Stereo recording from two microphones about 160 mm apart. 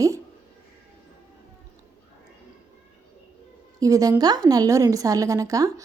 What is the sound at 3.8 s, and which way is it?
A woman's voice, 20° right (ahead or behind).